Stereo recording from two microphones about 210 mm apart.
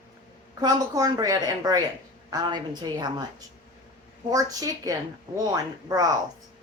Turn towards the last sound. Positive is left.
turn(degrees=-15)  # may be behind; listen again after turning